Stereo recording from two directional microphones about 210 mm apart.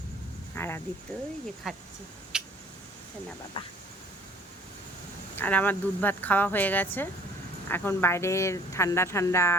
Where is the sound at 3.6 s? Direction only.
25° left (ahead or behind).